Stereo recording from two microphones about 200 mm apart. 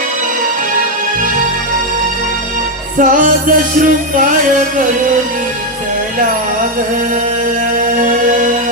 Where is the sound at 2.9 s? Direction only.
40° right (ahead or behind).